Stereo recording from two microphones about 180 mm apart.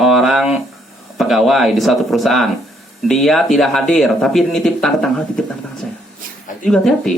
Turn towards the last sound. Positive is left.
turn(degrees=0)  # may be behind; listen again after turning